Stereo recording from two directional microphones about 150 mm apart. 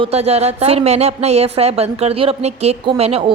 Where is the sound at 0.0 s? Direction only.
45° right (ahead or behind).